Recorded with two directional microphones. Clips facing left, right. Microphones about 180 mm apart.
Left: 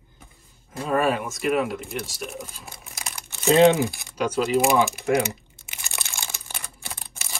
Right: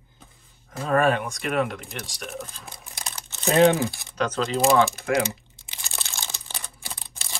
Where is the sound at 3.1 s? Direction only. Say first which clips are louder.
Left 2 dB; 15° left (ahead or behind).